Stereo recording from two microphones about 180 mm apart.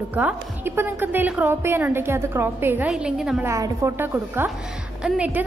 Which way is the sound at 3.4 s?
15° right (ahead or behind).